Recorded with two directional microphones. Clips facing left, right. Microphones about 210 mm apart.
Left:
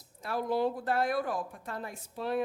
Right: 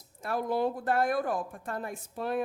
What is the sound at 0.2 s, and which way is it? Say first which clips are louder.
A woman's voice: right 1 dB; 50° right (ahead or behind).